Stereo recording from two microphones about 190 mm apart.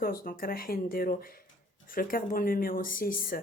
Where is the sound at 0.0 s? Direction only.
50° left (ahead or behind).